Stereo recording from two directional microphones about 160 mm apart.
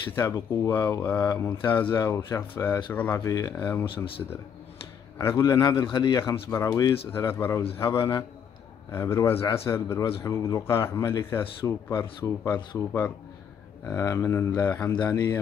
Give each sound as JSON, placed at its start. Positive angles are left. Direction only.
{"t": 0.1, "sound": "speech", "side_deg": 15}
{"t": 3.8, "sound": "speech", "side_deg": 30}
{"t": 5.2, "sound": "speech", "side_deg": 20}
{"t": 15.0, "sound": "speech", "side_deg": 25}